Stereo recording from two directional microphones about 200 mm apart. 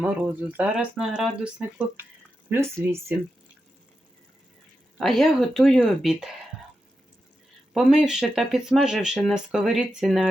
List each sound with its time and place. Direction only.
0.0 s speech: 5° right (ahead or behind)
4.9 s speech: centre (ahead or behind)
7.7 s speech: 5° right (ahead or behind)